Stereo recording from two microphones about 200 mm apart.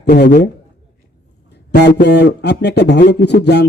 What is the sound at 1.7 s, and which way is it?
Speech, 55° left (ahead or behind).